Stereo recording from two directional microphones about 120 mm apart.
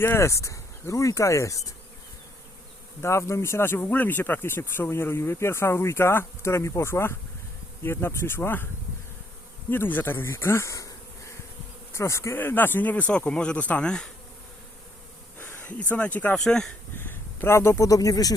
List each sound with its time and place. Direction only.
0.0 s speech: 20° left (ahead or behind)
3.0 s speech: 20° left (ahead or behind)
9.6 s speech: 15° left (ahead or behind)
15.4 s speech: 20° left (ahead or behind)
17.0 s speech: 20° left (ahead or behind)